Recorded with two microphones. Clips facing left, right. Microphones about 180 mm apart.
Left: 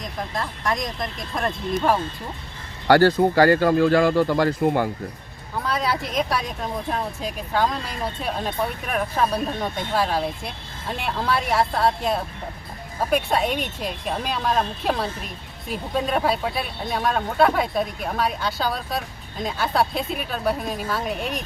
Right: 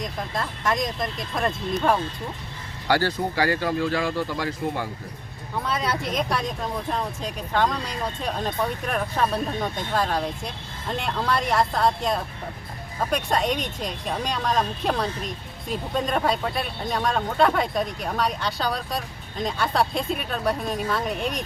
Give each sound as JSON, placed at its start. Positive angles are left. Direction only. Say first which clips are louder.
{"t": 0.0, "sound": "speech", "louder": "even", "side_deg": 0}
{"t": 2.8, "sound": "speech", "louder": "left 8 dB", "side_deg": 60}
{"t": 5.6, "sound": "speech", "louder": "left 2 dB", "side_deg": 0}